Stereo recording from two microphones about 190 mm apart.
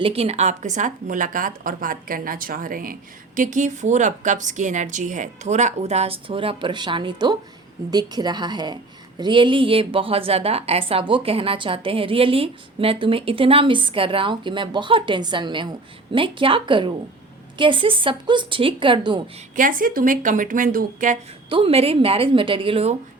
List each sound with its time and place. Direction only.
0.0 s a woman's voice: 30° right (ahead or behind)
19.5 s a woman's voice: 45° right (ahead or behind)
21.5 s a woman's voice: 30° right (ahead or behind)